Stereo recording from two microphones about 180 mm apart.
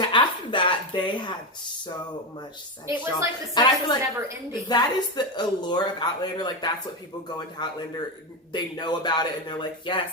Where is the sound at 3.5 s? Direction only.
20° left (ahead or behind).